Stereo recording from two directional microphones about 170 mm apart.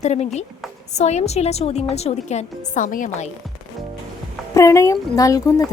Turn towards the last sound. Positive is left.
turn(degrees=20)  # may be behind; listen again after turning